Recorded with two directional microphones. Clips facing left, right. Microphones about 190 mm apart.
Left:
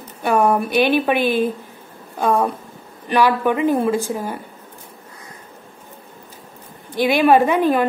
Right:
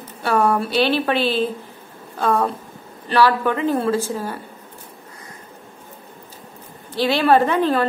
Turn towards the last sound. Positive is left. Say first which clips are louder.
# left 2 dB
turn(degrees=15)  # may be behind; listen again after turning